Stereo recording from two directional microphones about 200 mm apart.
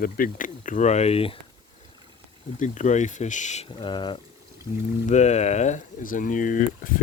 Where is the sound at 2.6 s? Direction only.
40° left (ahead or behind).